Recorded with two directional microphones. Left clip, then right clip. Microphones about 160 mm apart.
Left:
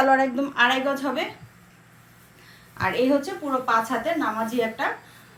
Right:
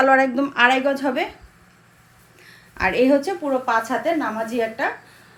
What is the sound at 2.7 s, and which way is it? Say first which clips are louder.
A woman's voice: right 4 dB; 50° right (ahead or behind).